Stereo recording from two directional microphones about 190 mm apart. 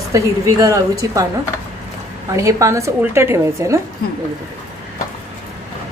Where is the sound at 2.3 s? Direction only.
15° right (ahead or behind).